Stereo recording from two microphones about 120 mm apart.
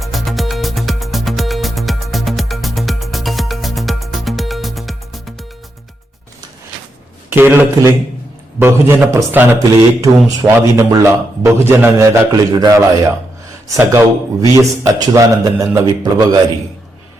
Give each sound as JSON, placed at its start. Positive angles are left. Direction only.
{"t": 0.0, "sound": "music", "side_deg": 0}
{"t": 7.3, "sound": "a man's voice", "side_deg": -15}